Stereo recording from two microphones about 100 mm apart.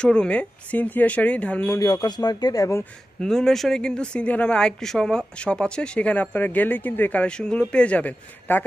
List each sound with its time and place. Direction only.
0.0 s speech: 10° left (ahead or behind)
1.8 s speech: 40° left (ahead or behind)
3.2 s speech: 5° left (ahead or behind)